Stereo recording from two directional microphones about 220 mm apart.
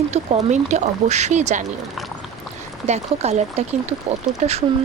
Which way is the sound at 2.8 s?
30° right (ahead or behind).